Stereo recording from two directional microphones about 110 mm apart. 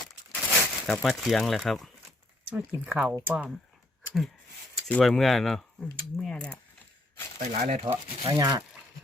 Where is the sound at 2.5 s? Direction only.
15° right (ahead or behind).